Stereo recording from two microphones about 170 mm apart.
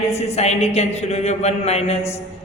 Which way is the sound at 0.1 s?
40° left (ahead or behind).